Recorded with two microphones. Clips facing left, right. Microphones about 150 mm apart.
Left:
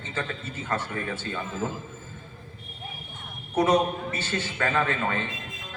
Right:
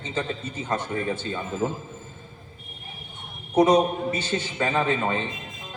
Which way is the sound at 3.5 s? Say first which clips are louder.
Right 4 dB; 15° right (ahead or behind).